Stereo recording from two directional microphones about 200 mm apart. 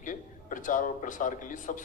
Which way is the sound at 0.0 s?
40° left (ahead or behind).